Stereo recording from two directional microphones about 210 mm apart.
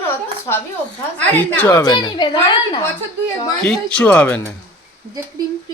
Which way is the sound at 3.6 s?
5° left (ahead or behind).